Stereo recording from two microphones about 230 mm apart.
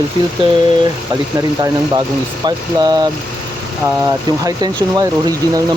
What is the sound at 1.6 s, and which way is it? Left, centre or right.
Speech, centre.